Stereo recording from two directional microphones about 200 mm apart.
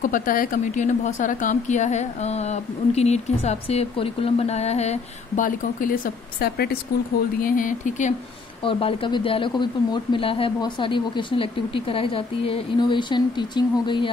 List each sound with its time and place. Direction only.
0.0 s a woman's voice: 45° left (ahead or behind)
8.6 s speech: 25° left (ahead or behind)